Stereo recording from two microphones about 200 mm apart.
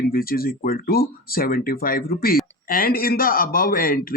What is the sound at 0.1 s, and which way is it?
Speech, 45° left (ahead or behind).